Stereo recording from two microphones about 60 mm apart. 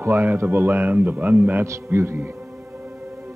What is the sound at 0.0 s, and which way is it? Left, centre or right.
Speech, right.